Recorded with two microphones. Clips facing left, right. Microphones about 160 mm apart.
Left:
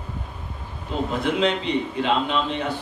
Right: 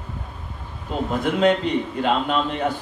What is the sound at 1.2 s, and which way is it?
A man's voice, 45° right (ahead or behind).